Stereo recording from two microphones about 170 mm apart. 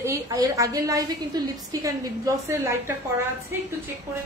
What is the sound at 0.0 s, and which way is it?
A woman's voice, 20° right (ahead or behind).